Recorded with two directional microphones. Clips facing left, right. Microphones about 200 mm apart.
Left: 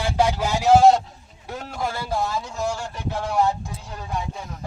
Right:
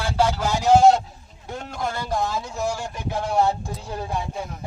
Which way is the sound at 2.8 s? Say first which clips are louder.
Right 1 dB; 15° right (ahead or behind).